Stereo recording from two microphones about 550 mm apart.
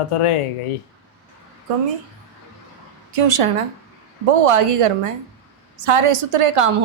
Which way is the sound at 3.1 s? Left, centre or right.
Right.